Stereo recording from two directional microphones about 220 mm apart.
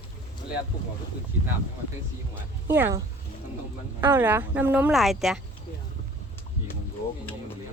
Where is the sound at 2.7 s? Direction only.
10° right (ahead or behind).